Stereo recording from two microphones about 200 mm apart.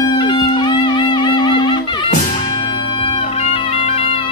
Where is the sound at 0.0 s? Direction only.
20° left (ahead or behind).